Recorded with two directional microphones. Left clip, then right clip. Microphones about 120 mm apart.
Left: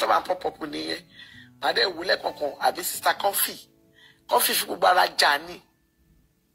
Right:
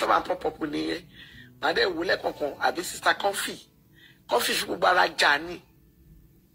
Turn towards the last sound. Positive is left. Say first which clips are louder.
# left 1 dB
turn(degrees=50)  # may be behind; listen again after turning